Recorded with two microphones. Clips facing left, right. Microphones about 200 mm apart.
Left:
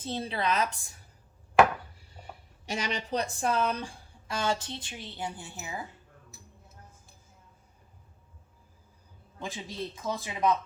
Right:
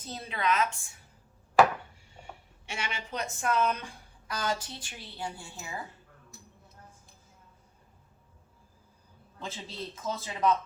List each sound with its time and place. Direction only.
0.0 s a woman's voice: 30° left (ahead or behind)
2.0 s speech: 35° left (ahead or behind); by 5.8 s 20° left (ahead or behind)
6.3 s a sound: 5° left (ahead or behind)
9.4 s a man's voice: 15° left (ahead or behind)